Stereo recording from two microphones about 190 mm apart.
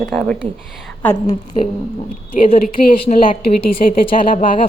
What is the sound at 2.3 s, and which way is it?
Speech, 50° left (ahead or behind).